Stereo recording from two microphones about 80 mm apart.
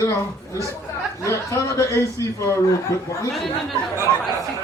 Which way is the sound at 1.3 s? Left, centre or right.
Left.